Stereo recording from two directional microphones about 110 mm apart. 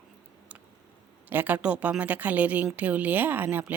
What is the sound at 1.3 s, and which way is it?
A woman's voice, 15° right (ahead or behind).